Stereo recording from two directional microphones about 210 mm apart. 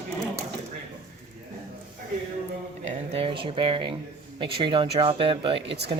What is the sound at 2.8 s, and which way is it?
Speech, 25° right (ahead or behind).